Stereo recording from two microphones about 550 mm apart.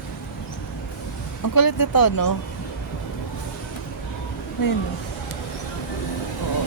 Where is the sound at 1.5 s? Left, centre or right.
Left.